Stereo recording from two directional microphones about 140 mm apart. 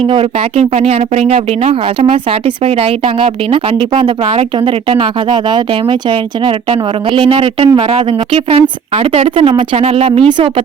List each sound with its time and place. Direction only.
0.0 s speech: 40° right (ahead or behind)